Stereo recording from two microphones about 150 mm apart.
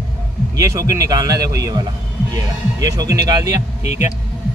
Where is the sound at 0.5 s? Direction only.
20° right (ahead or behind).